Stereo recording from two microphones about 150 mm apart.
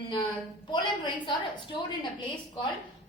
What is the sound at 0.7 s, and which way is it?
A woman's voice, 30° left (ahead or behind).